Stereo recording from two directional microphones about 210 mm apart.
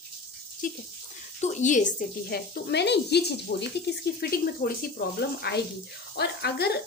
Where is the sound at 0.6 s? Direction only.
40° left (ahead or behind).